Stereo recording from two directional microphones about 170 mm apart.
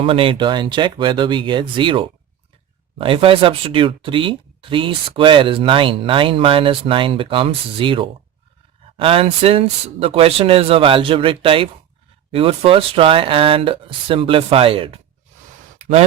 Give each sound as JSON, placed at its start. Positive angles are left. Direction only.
{"t": 0.0, "sound": "speech", "side_deg": -35}